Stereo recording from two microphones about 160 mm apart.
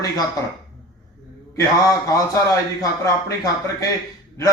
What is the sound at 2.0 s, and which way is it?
Speech, 20° left (ahead or behind).